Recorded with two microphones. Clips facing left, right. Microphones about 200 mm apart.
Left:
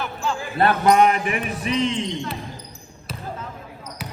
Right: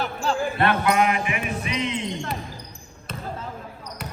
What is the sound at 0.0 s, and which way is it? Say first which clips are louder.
Basketball bounce: right 1 dB; 35° right (ahead or behind).